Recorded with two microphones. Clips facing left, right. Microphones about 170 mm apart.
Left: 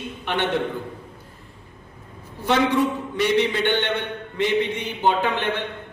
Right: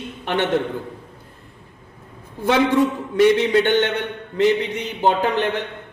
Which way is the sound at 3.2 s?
45° right (ahead or behind).